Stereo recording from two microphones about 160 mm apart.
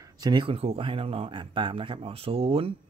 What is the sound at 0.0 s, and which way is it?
Speech, 25° right (ahead or behind).